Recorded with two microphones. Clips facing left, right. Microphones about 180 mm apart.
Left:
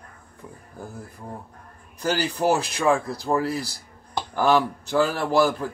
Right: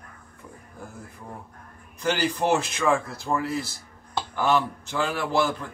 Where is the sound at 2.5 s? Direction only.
35° left (ahead or behind).